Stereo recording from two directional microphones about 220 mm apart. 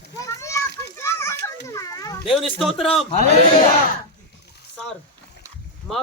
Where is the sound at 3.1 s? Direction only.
30° left (ahead or behind).